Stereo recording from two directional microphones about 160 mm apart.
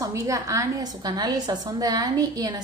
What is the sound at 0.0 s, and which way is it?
A woman's voice, 20° right (ahead or behind).